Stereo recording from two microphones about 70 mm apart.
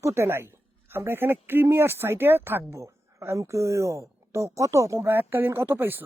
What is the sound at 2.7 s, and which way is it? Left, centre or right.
Speech, right.